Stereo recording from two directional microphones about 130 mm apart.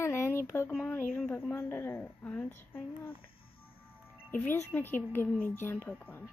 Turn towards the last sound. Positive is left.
turn(degrees=10)  # may be behind; listen again after turning